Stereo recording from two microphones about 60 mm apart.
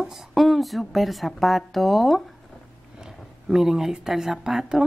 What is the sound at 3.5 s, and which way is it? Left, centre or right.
Speech, centre.